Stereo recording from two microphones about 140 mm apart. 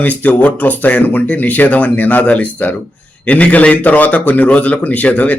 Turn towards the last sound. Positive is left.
turn(degrees=10)  # may be behind; listen again after turning